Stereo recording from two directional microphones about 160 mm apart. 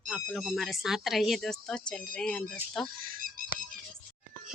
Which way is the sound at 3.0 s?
60° right (ahead or behind).